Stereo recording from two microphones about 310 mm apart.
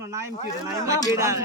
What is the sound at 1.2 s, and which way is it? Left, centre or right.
Speech, centre.